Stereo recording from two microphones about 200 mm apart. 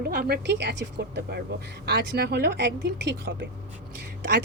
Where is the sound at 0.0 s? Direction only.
50° right (ahead or behind).